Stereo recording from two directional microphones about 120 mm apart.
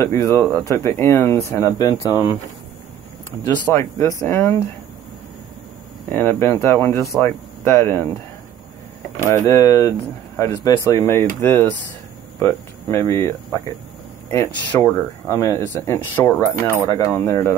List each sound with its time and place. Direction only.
0.0 s speech: 20° left (ahead or behind)
3.4 s speech: 20° left (ahead or behind)
6.0 s speech: 15° left (ahead or behind)
9.2 s speech: 25° left (ahead or behind)